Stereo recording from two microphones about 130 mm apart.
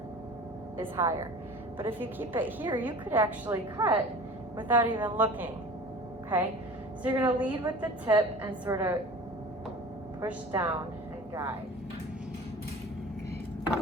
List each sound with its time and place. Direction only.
0.8 s a woman's voice: 20° right (ahead or behind)
7.0 s a woman's voice: 15° right (ahead or behind)
10.2 s a woman's voice: 15° right (ahead or behind)